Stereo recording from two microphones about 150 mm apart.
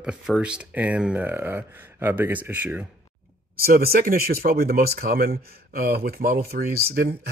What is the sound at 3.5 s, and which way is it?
Speech, 85° right.